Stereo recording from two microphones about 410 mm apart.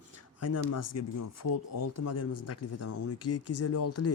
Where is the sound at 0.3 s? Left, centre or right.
Left.